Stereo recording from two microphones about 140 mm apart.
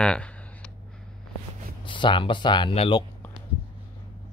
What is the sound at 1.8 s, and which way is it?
Speech, 35° left (ahead or behind).